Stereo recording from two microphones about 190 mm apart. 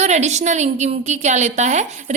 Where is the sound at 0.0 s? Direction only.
35° right (ahead or behind).